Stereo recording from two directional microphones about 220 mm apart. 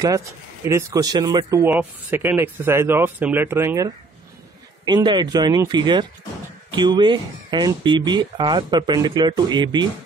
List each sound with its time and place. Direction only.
0.7 s speech: 15° right (ahead or behind)